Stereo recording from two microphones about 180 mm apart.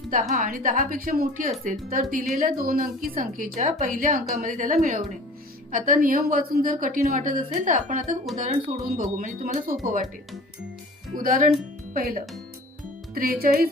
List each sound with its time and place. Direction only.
0.3 s a woman's voice: 50° right (ahead or behind)
11.2 s a woman's voice: 50° right (ahead or behind)